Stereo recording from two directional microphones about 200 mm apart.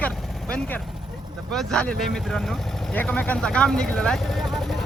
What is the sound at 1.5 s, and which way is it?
A man's voice, 5° left (ahead or behind).